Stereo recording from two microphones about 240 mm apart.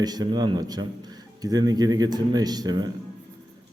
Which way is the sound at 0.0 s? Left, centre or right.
Centre.